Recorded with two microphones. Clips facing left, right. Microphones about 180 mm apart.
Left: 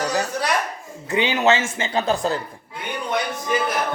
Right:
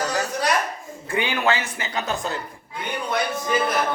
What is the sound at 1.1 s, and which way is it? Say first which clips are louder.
A woman's voice: left 4 dB; 20° left (ahead or behind).